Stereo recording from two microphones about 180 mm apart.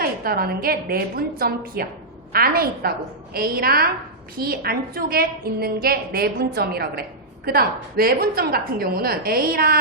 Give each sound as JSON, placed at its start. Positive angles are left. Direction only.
{"t": 0.0, "sound": "a woman's voice", "side_deg": -55}